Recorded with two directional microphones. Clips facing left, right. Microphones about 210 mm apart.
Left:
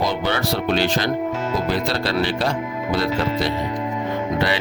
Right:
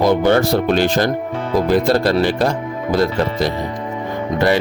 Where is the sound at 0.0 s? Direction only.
50° right (ahead or behind).